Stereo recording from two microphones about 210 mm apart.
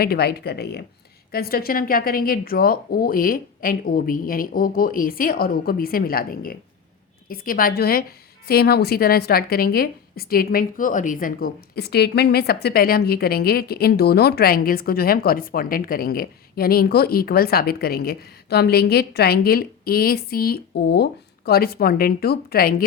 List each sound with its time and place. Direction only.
0.0 s a woman's voice: 45° left (ahead or behind)